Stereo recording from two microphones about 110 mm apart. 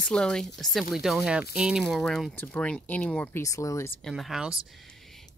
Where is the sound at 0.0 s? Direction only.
5° left (ahead or behind).